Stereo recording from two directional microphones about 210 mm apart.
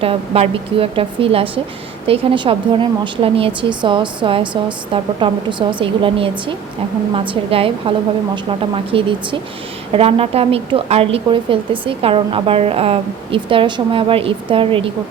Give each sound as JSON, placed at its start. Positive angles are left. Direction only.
{"t": 0.0, "sound": "a woman's voice", "side_deg": -30}